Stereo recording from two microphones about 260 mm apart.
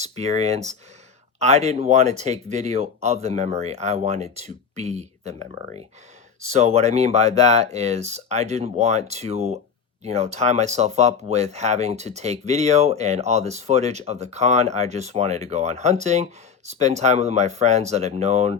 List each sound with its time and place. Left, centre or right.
0.0 s speech: right
6.5 s speech: right